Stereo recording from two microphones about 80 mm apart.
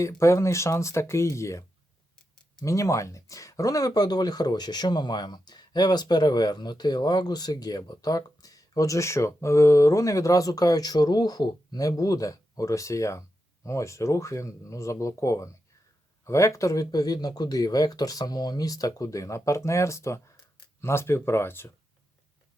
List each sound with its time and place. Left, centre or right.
0.2 s speech: left
2.6 s speech: left